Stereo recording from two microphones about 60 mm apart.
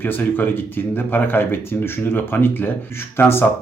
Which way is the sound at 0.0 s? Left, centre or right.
Left.